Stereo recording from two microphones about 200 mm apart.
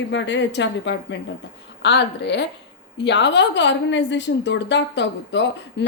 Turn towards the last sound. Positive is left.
turn(degrees=60)  # may be behind; listen again after turning